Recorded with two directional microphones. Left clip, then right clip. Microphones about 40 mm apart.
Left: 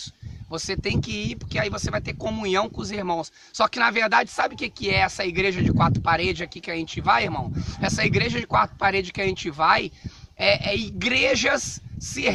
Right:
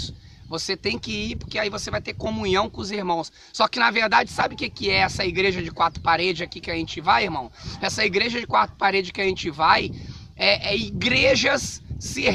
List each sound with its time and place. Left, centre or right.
0.5 s speech: centre
2.2 s speech: left